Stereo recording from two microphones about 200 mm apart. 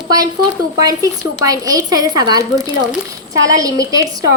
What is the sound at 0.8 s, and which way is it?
A woman's voice, 15° right (ahead or behind).